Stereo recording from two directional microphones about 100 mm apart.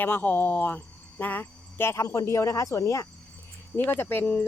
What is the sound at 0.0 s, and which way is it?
Speech, 20° left (ahead or behind).